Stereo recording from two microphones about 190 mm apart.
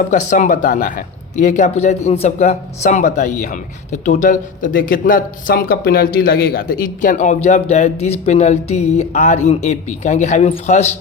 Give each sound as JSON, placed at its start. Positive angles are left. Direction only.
{"t": 0.0, "sound": "a man's voice", "side_deg": 40}